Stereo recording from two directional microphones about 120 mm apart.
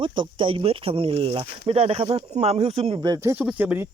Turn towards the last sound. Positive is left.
turn(degrees=-15)  # may be behind; listen again after turning